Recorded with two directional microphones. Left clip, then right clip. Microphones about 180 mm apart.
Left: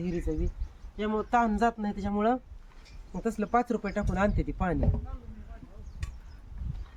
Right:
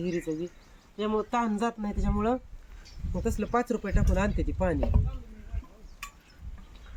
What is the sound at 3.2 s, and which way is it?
Speech, 30° left (ahead or behind).